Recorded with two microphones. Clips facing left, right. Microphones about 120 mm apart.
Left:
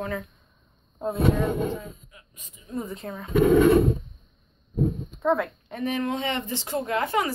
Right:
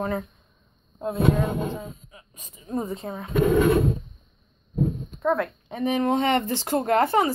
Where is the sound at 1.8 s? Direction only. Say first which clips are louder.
Right 3 dB; 25° right (ahead or behind).